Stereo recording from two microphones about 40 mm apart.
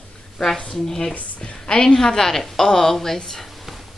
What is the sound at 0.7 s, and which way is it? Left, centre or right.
A woman's voice, centre.